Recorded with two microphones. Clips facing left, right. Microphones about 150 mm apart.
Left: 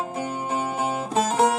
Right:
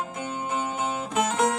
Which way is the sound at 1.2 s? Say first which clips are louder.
Left 3 dB; 35° left (ahead or behind).